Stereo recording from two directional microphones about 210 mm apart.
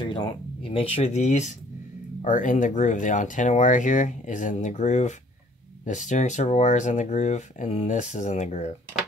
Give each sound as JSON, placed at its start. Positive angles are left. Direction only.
{"t": 0.0, "sound": "speech", "side_deg": 20}